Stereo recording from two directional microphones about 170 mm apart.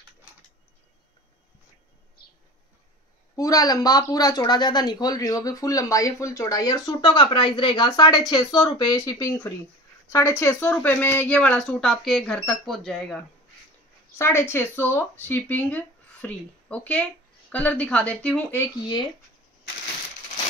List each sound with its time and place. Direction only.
3.3 s speech: 20° left (ahead or behind); by 13.2 s 5° left (ahead or behind)
14.1 s speech: 15° left (ahead or behind)